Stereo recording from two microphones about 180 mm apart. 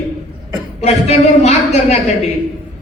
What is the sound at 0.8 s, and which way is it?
Speech, 35° left (ahead or behind).